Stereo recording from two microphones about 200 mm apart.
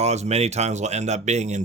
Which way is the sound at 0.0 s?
35° right (ahead or behind).